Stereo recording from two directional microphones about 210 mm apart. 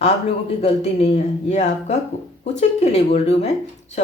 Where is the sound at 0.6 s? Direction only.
30° left (ahead or behind).